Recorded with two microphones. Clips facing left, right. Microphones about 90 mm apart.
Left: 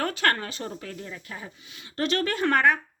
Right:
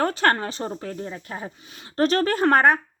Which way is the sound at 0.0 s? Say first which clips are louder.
Right 5 dB; 35° right (ahead or behind).